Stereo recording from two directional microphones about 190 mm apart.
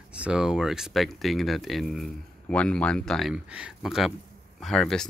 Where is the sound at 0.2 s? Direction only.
5° right (ahead or behind).